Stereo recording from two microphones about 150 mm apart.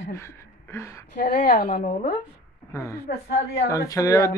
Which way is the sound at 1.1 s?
70° left (ahead or behind).